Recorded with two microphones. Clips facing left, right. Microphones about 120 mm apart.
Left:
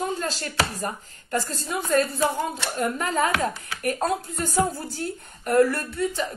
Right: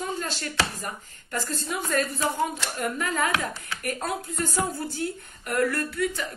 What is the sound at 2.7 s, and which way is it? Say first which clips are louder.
Speech: left 3 dB; 35° left (ahead or behind).